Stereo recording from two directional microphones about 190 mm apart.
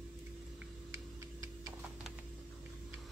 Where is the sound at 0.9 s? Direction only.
20° right (ahead or behind).